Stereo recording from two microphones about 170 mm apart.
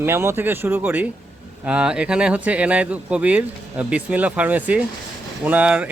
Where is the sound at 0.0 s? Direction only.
15° right (ahead or behind).